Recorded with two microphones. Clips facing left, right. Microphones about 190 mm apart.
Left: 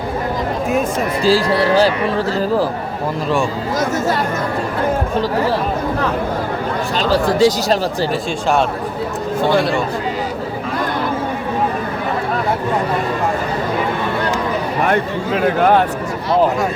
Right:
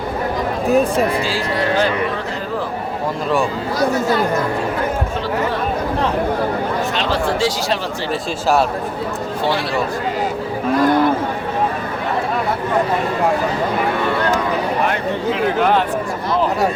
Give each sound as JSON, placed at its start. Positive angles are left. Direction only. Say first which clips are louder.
{"t": 1.2, "sound": "speech", "louder": "left 6 dB", "side_deg": 35}
{"t": 6.9, "sound": "speech", "louder": "left 3 dB", "side_deg": 40}
{"t": 15.5, "sound": "speech", "louder": "left 4 dB", "side_deg": 50}